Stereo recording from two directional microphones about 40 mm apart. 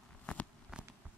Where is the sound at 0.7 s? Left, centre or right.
Centre.